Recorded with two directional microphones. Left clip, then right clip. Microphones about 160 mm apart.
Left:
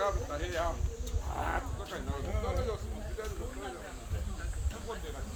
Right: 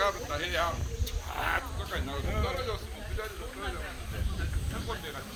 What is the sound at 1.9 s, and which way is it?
Speech, 30° left (ahead or behind).